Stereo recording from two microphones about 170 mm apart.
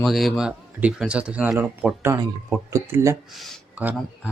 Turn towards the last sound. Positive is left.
turn(degrees=0)  # may be behind; listen again after turning